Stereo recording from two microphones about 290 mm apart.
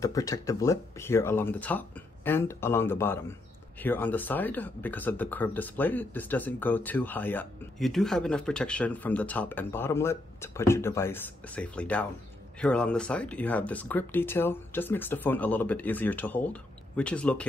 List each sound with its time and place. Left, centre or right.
0.0 s speech: centre